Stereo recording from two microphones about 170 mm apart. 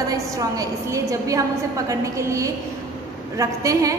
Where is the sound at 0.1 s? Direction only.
20° right (ahead or behind).